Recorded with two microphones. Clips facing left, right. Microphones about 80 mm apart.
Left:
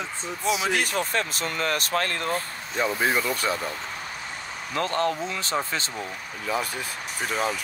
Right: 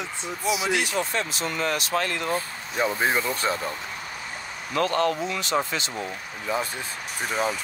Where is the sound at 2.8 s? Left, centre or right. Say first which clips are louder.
Even; right.